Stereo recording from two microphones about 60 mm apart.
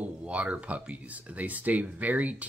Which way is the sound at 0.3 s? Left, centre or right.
Right.